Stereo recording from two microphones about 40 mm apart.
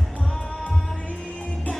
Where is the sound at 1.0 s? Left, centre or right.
Left.